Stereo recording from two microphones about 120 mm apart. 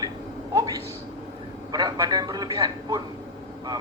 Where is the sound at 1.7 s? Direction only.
35° right (ahead or behind).